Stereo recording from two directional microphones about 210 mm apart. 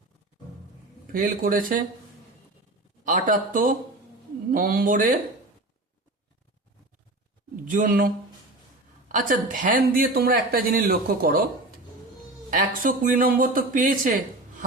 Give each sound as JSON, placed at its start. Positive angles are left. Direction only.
{"t": 1.1, "sound": "a man's voice", "side_deg": -40}
{"t": 3.0, "sound": "a man's voice", "side_deg": -40}
{"t": 7.7, "sound": "a man's voice", "side_deg": -40}
{"t": 9.1, "sound": "speech", "side_deg": -40}
{"t": 12.5, "sound": "a man's voice", "side_deg": -40}